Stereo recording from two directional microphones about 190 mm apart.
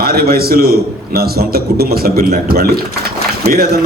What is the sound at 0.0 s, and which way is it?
A man's voice, 50° right (ahead or behind).